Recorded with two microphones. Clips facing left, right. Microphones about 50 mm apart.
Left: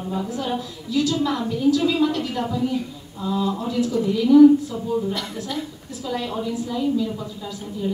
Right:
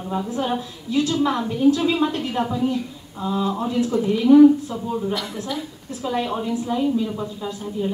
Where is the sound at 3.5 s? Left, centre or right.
Right.